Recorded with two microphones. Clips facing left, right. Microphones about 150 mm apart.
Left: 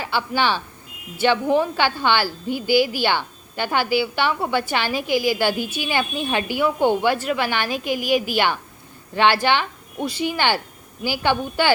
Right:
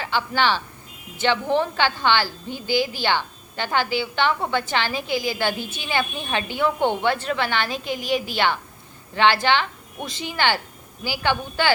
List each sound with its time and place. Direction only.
0.0 s a woman's voice: 15° left (ahead or behind)